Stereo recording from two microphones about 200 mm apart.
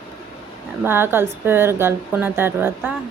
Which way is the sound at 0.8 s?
10° right (ahead or behind).